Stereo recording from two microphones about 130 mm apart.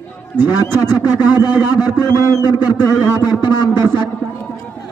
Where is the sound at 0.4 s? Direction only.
30° left (ahead or behind).